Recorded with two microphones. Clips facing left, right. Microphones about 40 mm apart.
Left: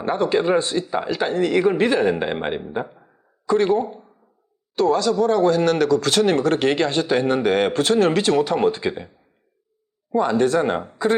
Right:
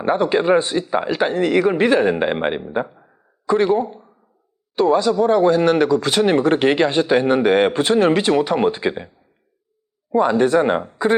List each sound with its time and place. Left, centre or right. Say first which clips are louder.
0.0 s speech: right 2 dB; centre
2.8 s a sound: right 1 dB; centre
3.4 s speech: right 2 dB; centre
10.1 s speech: right 3 dB; centre